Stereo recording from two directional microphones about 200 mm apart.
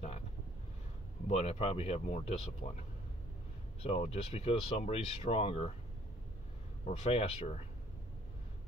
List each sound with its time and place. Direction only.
1.2 s speech: 30° left (ahead or behind)
3.8 s speech: 30° left (ahead or behind)
6.9 s speech: 30° left (ahead or behind)